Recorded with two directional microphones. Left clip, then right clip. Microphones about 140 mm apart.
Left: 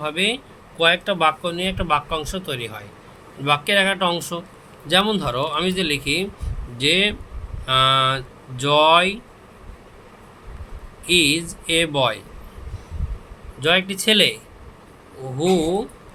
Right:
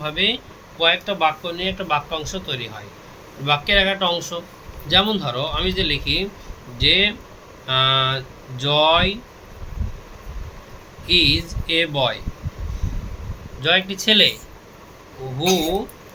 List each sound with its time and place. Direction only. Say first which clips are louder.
0.0 s speech: right 1 dB; 55° left (ahead or behind)
0.8 s speech: even; 75° left (ahead or behind)
11.0 s speech: right 1 dB; 60° left (ahead or behind)
13.6 s speech: even; 55° left (ahead or behind)